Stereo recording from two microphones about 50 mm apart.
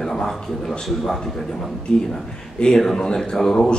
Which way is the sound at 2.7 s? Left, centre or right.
Centre.